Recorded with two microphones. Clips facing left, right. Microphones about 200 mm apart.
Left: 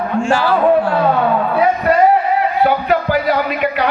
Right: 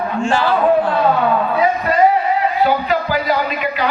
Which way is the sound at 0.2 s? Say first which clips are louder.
Left 2 dB; 10° left (ahead or behind).